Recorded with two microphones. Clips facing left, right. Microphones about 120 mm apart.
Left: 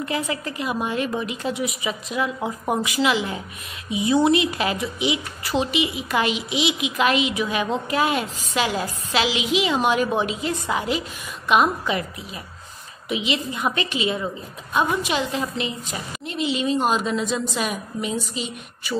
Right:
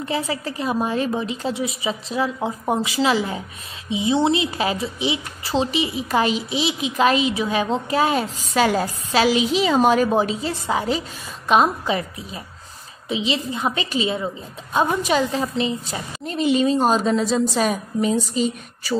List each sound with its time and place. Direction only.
0.0 s a woman's voice: 30° right (ahead or behind)